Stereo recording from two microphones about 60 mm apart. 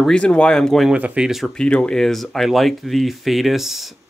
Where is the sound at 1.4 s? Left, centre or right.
Centre.